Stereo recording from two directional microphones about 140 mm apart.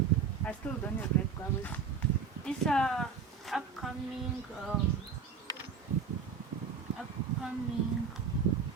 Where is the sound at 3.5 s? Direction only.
Centre (ahead or behind).